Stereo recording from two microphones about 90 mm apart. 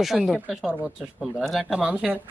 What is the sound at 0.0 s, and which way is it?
Speech, centre (ahead or behind).